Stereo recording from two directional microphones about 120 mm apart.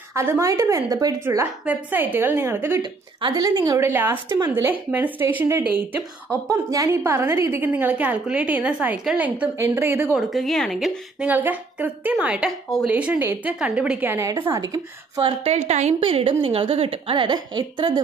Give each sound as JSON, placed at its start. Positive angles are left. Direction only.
{"t": 0.1, "sound": "a woman's voice", "side_deg": -20}
{"t": 1.2, "sound": "a woman's voice", "side_deg": -20}
{"t": 2.8, "sound": "speech", "side_deg": -35}
{"t": 3.8, "sound": "a woman's voice", "side_deg": -20}
{"t": 6.5, "sound": "a woman's voice", "side_deg": -30}
{"t": 9.6, "sound": "a woman's voice", "side_deg": -20}
{"t": 10.1, "sound": "a woman's voice", "side_deg": 0}
{"t": 11.2, "sound": "a woman's voice", "side_deg": -15}
{"t": 12.9, "sound": "a woman's voice", "side_deg": -10}
{"t": 14.1, "sound": "a woman's voice", "side_deg": -25}
{"t": 15.2, "sound": "a woman's voice", "side_deg": -60}